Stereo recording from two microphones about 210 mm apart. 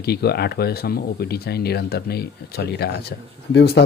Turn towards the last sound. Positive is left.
turn(degrees=50)  # may be behind; listen again after turning